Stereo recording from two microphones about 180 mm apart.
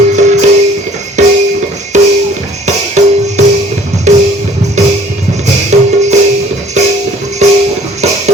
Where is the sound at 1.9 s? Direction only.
40° right (ahead or behind).